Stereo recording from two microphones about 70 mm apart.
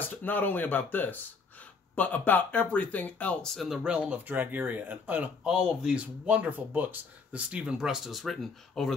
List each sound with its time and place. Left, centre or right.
0.0 s speech: left
3.6 s speech: centre
3.9 s speech: centre
5.4 s speech: centre
6.2 s speech: right; by 8.9 s centre